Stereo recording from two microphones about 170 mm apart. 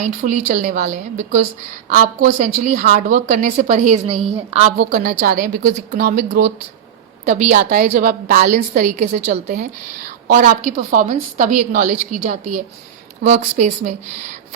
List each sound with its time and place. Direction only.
0.0 s a woman's voice: 50° right (ahead or behind)
2.4 s a woman's voice: 50° right (ahead or behind)